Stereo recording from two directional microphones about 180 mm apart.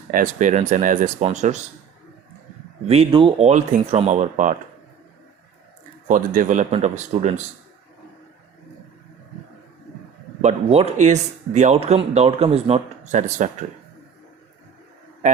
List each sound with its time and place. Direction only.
0.1 s speech: 45° right (ahead or behind)
2.8 s speech: 35° right (ahead or behind)
6.1 s speech: 45° right (ahead or behind)
10.4 s speech: 35° right (ahead or behind)